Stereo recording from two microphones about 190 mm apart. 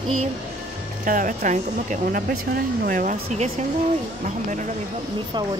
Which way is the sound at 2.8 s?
45° right (ahead or behind).